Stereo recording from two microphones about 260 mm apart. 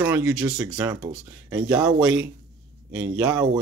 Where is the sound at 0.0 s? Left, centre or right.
Centre.